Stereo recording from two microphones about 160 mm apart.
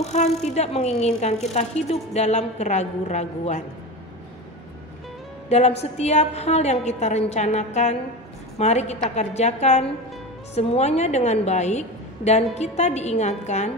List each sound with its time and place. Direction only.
0.0 s speech: 45° left (ahead or behind)
5.5 s speech: 40° left (ahead or behind)